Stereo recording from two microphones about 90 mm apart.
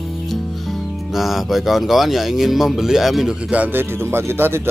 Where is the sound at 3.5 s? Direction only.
15° right (ahead or behind).